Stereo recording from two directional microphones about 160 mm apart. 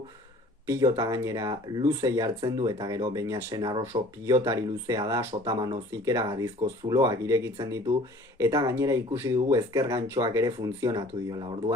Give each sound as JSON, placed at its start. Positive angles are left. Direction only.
{"t": 0.7, "sound": "speech", "side_deg": -20}